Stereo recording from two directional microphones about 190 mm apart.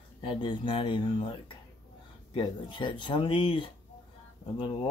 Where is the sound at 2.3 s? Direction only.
25° left (ahead or behind).